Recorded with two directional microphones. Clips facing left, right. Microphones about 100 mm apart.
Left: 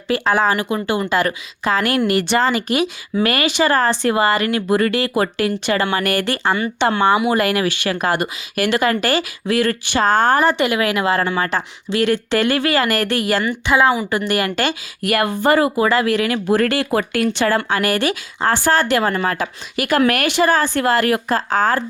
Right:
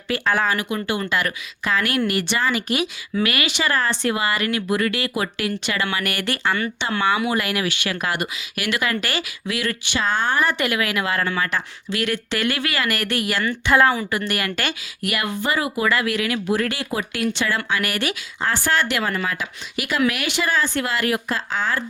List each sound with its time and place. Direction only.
0.1 s speech: 30° left (ahead or behind)
13.8 s speech: 15° left (ahead or behind)
14.1 s speech: 30° left (ahead or behind); by 15.7 s 45° left (ahead or behind)
15.7 s speech: 30° left (ahead or behind); by 17.2 s 55° left (ahead or behind)
17.3 s speech: 45° left (ahead or behind)